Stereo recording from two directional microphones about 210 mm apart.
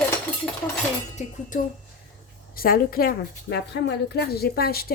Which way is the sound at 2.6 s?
45° left (ahead or behind).